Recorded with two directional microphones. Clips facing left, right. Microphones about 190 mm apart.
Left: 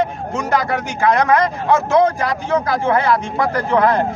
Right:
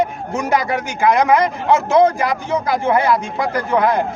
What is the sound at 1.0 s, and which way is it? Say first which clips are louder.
Speech: right 1 dB; 15° right (ahead or behind).